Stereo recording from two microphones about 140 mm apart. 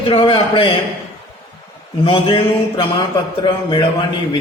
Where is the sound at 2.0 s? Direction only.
40° left (ahead or behind).